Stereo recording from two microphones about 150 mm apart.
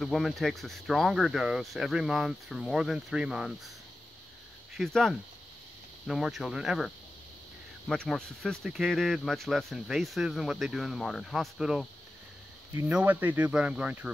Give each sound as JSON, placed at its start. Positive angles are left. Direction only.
{"t": 0.0, "sound": "speech", "side_deg": 0}
{"t": 4.7, "sound": "speech", "side_deg": 0}
{"t": 7.9, "sound": "speech", "side_deg": 5}